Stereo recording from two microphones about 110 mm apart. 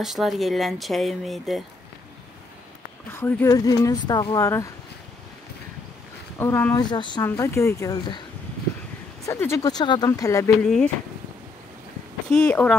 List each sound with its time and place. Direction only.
0.0 s speech: centre (ahead or behind)
3.1 s speech: 20° left (ahead or behind)
3.4 s speech: 30° left (ahead or behind)
4.4 s speech: 25° left (ahead or behind)
6.3 s speech: 20° left (ahead or behind)
6.8 s speech: 40° left (ahead or behind)
7.2 s speech: 25° left (ahead or behind)
9.2 s speech: 25° left (ahead or behind)
9.7 s speech: 40° left (ahead or behind)
10.6 s speech: 5° left (ahead or behind)
12.3 s speech: 10° left (ahead or behind)